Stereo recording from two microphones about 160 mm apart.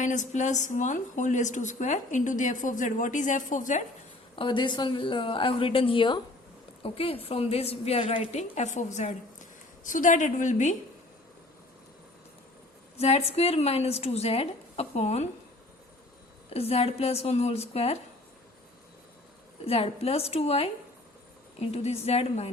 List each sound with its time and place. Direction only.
0.0 s a woman's voice: 50° left (ahead or behind)
4.4 s a woman's voice: 30° left (ahead or behind); by 10.8 s 50° left (ahead or behind)
13.0 s a woman's voice: 40° left (ahead or behind)
16.5 s a woman's voice: 40° left (ahead or behind)
19.6 s a woman's voice: 40° left (ahead or behind)
21.7 s a woman's voice: 40° left (ahead or behind)